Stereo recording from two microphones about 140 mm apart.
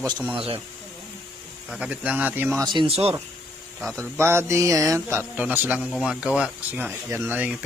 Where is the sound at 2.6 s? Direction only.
35° right (ahead or behind).